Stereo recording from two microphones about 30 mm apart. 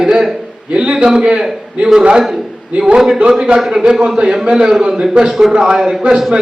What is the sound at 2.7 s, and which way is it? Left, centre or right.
Speech, right.